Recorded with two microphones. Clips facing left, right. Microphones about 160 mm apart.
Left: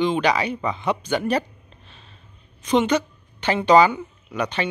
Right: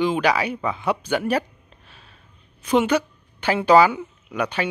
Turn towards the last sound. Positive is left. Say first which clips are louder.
# even
turn(degrees=-10)  # may be behind; listen again after turning